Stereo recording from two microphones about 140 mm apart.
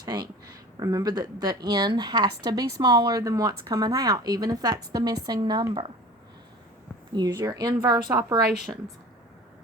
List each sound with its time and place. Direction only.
0.0 s speech: 30° right (ahead or behind)
7.1 s speech: 30° right (ahead or behind)